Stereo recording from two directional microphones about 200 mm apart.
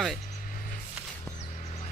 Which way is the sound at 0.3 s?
40° left (ahead or behind).